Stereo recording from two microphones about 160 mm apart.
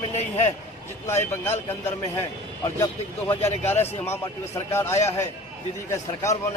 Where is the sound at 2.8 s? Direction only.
15° left (ahead or behind).